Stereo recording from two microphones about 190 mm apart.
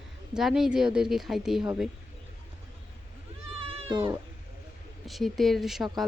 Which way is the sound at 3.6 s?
30° right (ahead or behind).